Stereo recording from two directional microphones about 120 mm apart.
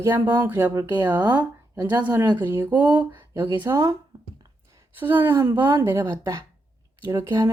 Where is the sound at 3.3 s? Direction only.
20° right (ahead or behind).